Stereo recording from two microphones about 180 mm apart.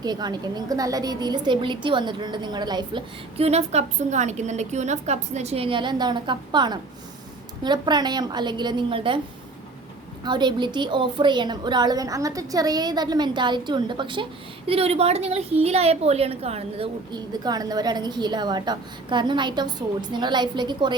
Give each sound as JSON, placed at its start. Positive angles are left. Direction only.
{"t": 0.0, "sound": "a woman's voice", "side_deg": -20}
{"t": 10.2, "sound": "a woman's voice", "side_deg": -25}